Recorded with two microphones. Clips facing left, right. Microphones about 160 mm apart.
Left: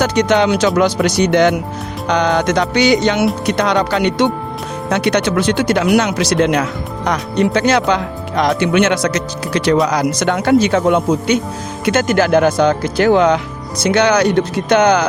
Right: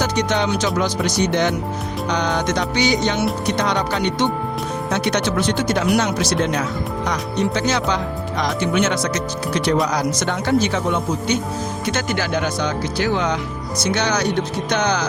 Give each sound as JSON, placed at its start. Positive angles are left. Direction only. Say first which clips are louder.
{"t": 0.0, "sound": "speech", "louder": "left 7 dB", "side_deg": 70}
{"t": 9.8, "sound": "speech", "louder": "left 5 dB", "side_deg": 65}
{"t": 11.9, "sound": "speech", "louder": "left 11 dB", "side_deg": 50}